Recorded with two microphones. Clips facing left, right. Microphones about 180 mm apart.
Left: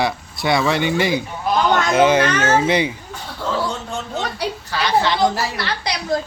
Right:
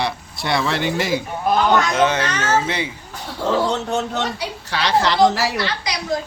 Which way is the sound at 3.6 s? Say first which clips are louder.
Right 5 dB; 70° right (ahead or behind).